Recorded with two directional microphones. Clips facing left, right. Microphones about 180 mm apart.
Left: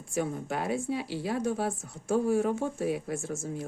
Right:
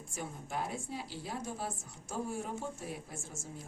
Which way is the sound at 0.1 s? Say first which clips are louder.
Left 11 dB; 75° left (ahead or behind).